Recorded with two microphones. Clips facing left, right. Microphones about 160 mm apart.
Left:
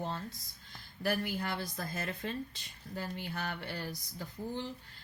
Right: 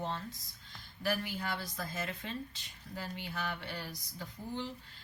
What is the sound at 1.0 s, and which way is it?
Speech, 50° left (ahead or behind).